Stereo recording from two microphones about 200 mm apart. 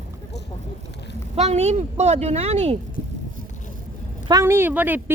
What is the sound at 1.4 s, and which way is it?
Speech, 30° right (ahead or behind).